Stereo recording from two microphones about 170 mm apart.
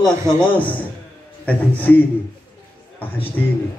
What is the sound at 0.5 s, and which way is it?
A man's voice, 10° left (ahead or behind).